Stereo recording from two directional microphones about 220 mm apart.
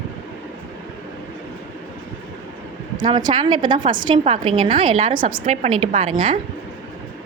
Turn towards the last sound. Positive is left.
turn(degrees=-25)  # may be behind; listen again after turning